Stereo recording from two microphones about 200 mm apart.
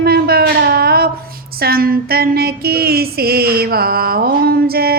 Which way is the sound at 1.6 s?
50° right (ahead or behind).